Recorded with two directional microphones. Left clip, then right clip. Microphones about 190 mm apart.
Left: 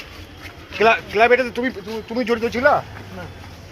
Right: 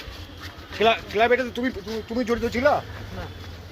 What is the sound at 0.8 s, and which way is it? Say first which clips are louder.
Speech: left 5 dB; 5° right (ahead or behind).